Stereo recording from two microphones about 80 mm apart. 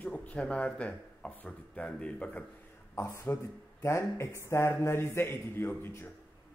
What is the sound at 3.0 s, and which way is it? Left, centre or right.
A man's voice, left.